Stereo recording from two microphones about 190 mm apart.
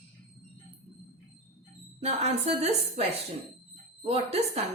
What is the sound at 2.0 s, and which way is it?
A woman's voice, 35° right (ahead or behind).